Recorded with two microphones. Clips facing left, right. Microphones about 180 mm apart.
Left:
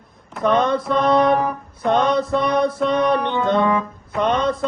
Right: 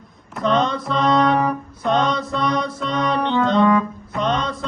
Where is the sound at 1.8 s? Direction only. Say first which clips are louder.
Left 3 dB; 55° left (ahead or behind).